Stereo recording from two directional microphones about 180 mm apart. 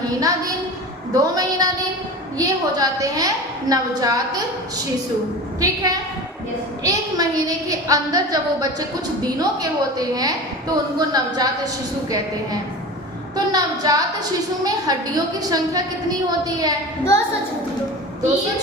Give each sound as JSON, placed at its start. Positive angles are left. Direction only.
{"t": 0.2, "sound": "a woman's voice", "side_deg": -20}
{"t": 5.5, "sound": "a woman's voice", "side_deg": -20}
{"t": 13.3, "sound": "a sound", "side_deg": -20}
{"t": 14.6, "sound": "a woman's voice", "side_deg": -20}